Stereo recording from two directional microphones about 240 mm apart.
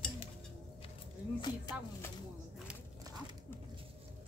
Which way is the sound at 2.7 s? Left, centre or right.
Centre.